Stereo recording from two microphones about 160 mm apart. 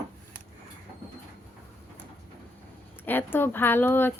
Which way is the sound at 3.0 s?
15° left (ahead or behind).